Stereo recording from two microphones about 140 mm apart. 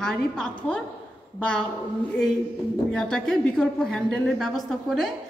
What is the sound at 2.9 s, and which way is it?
Speech, 5° left (ahead or behind).